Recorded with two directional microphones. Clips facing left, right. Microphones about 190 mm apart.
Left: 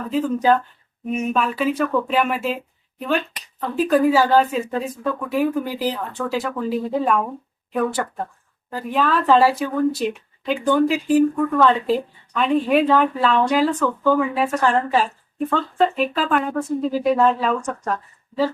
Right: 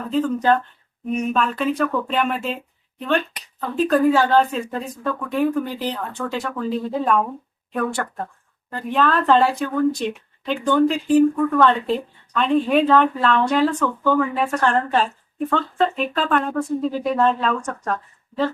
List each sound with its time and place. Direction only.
0.1 s speech: 5° left (ahead or behind)
3.8 s speech: 5° left (ahead or behind)